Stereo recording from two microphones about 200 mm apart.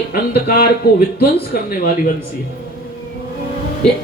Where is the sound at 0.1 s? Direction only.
50° left (ahead or behind).